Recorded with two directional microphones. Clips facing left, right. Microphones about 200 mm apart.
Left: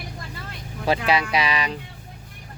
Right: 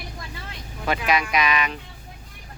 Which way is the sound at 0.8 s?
30° left (ahead or behind).